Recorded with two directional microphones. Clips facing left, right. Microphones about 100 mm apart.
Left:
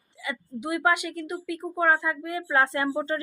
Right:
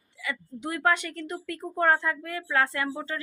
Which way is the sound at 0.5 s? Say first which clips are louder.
Left 2 dB; 10° left (ahead or behind).